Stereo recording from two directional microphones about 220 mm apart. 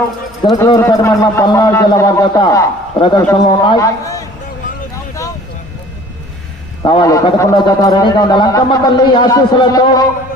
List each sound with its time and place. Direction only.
0.4 s a man's voice: 20° left (ahead or behind)
6.8 s a man's voice: 20° left (ahead or behind)